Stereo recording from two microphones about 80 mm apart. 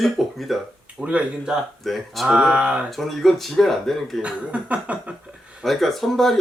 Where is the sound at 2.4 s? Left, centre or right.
Centre.